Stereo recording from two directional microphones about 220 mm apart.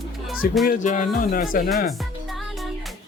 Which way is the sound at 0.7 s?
35° left (ahead or behind).